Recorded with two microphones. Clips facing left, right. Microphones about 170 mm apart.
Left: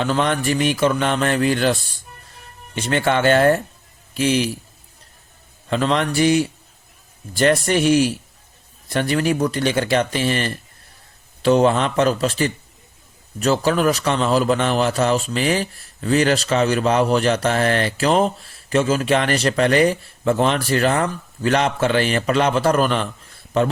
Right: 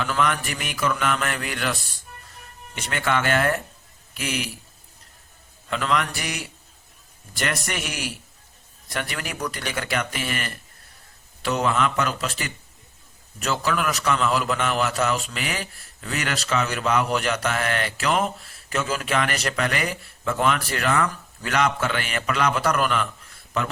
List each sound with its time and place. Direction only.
0.0 s music: 30° left (ahead or behind)
5.6 s music: 30° left (ahead or behind)
7.3 s a man's voice: 30° left (ahead or behind)
8.9 s music: 30° left (ahead or behind)
11.4 s a man's voice: 30° left (ahead or behind)